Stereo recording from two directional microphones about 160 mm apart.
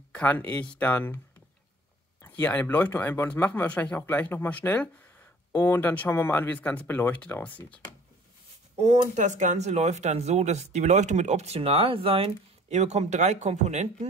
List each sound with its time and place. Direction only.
0.1 s speech: 10° left (ahead or behind)
2.2 s speech: 10° left (ahead or behind)
8.7 s speech: 45° right (ahead or behind)